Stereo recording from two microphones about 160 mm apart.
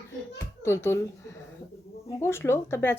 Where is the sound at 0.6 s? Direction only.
15° left (ahead or behind).